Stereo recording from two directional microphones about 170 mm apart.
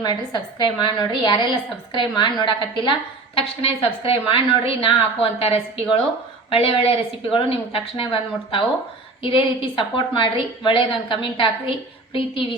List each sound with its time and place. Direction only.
0.0 s a woman's voice: 25° left (ahead or behind)